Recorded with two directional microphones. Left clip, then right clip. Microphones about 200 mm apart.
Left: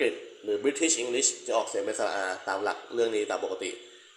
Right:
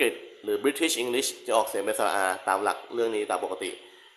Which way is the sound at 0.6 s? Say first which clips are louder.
Right 1 dB; 20° right (ahead or behind).